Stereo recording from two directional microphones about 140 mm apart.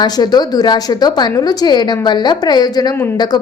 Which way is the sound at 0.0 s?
30° left (ahead or behind).